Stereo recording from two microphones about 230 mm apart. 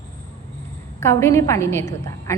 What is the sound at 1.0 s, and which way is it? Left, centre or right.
A woman's voice, centre.